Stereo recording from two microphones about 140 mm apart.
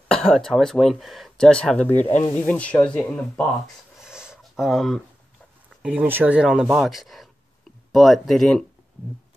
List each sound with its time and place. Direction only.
0.1 s speech: centre (ahead or behind)
2.0 s speech: 45° left (ahead or behind)
2.3 s speech: 10° left (ahead or behind)
4.0 s a sound: 5° right (ahead or behind)
5.7 s speech: 5° right (ahead or behind)